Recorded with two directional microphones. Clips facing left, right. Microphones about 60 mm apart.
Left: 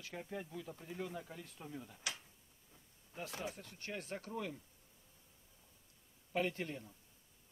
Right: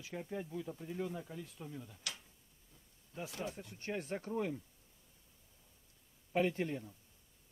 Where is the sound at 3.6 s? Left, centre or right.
Right.